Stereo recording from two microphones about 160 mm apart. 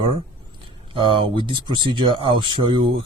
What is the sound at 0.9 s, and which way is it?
Speech, 30° right (ahead or behind).